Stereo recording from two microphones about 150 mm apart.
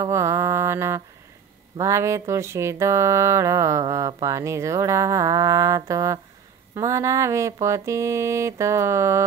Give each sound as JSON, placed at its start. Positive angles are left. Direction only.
{"t": 0.0, "sound": "mantra", "side_deg": -20}
{"t": 1.8, "sound": "music", "side_deg": -20}